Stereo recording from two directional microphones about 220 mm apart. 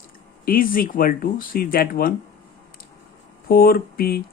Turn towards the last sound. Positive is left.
turn(degrees=45)  # may be behind; listen again after turning